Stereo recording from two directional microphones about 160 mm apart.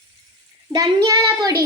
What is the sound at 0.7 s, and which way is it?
Speech, 25° right (ahead or behind).